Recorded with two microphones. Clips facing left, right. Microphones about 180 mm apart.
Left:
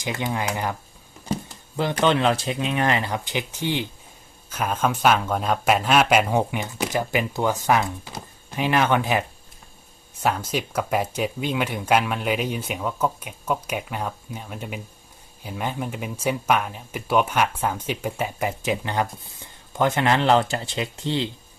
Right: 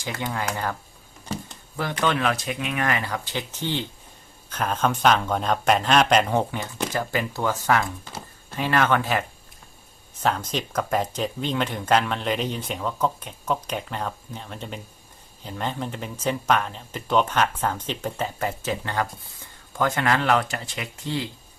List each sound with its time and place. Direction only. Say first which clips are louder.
0.0 s speech: left 2 dB; 20° left (ahead or behind)